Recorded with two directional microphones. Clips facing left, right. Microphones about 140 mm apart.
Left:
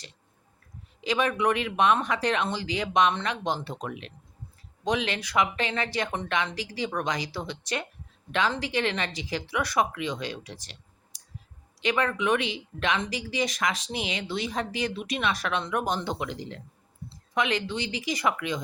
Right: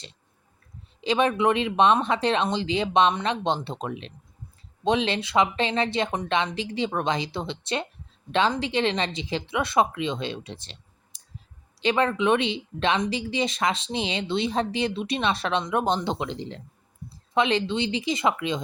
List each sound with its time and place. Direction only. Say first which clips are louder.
1.0 s speech: right 3 dB; 30° right (ahead or behind)